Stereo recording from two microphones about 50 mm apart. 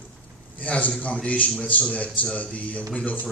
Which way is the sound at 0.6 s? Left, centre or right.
Left.